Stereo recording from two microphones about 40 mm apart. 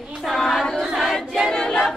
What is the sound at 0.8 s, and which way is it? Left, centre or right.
Choir, centre.